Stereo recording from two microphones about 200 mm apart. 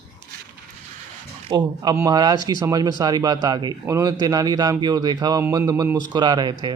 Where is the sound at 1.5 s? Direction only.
20° right (ahead or behind).